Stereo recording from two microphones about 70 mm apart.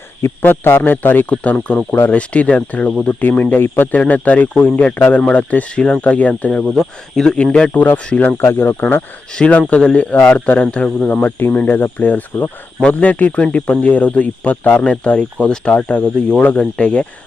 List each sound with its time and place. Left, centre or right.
0.2 s speech: left
1.5 s speech: centre
6.7 s speech: centre
8.5 s speech: left
9.3 s speech: centre